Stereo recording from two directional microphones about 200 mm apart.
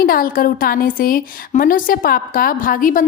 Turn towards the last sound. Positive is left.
turn(degrees=40)  # may be behind; listen again after turning